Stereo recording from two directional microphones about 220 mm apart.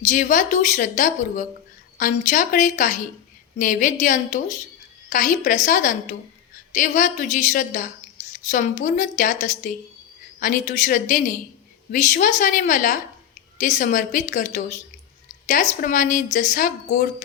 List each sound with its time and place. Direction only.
0.1 s a woman's voice: 35° left (ahead or behind)